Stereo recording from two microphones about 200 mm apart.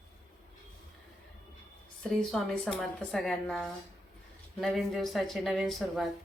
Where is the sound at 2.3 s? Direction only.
Centre (ahead or behind).